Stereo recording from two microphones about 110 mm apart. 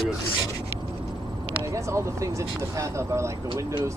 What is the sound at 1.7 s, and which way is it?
Speech, 25° right (ahead or behind).